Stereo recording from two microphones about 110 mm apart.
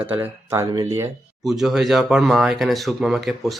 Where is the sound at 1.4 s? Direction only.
5° right (ahead or behind).